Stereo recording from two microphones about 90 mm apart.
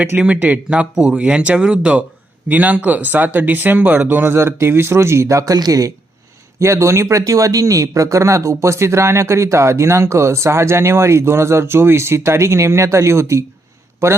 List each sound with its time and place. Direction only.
0.2 s speech: 15° right (ahead or behind); by 5.9 s 45° right (ahead or behind)
6.6 s speech: 30° right (ahead or behind)